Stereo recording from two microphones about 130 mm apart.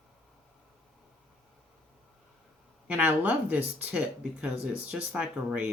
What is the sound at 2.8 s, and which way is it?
Speech, 15° right (ahead or behind).